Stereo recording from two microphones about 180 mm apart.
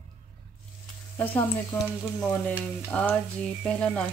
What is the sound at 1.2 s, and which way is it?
Speech, 10° left (ahead or behind).